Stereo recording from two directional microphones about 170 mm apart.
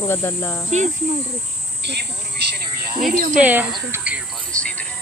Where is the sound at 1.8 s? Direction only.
80° right.